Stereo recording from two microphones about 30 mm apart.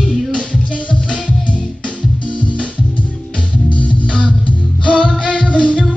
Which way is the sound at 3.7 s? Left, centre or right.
Left.